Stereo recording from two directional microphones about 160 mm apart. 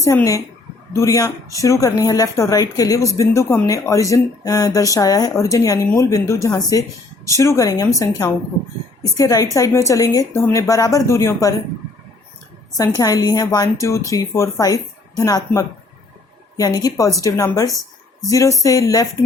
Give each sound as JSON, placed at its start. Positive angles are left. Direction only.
{"t": 0.0, "sound": "speech", "side_deg": 20}
{"t": 13.0, "sound": "speech", "side_deg": 25}
{"t": 17.7, "sound": "a sound", "side_deg": 0}
{"t": 18.3, "sound": "speech", "side_deg": 20}